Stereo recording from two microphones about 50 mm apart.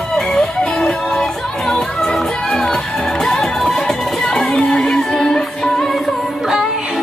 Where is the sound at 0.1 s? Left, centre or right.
Centre.